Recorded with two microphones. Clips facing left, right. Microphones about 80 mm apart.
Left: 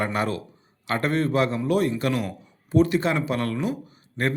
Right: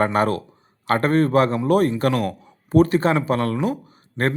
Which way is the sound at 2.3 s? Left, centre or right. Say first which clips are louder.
Right 5 dB; right.